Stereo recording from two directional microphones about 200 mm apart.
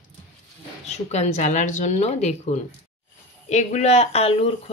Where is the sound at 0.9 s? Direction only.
35° left (ahead or behind).